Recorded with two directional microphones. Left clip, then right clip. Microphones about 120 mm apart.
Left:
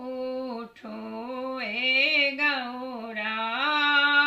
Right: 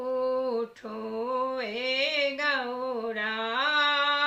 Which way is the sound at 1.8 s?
25° right (ahead or behind).